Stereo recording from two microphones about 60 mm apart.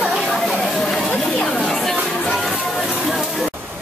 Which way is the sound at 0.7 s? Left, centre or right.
Centre.